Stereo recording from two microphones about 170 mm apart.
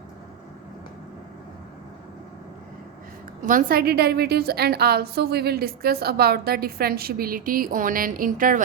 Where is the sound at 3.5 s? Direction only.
55° right (ahead or behind).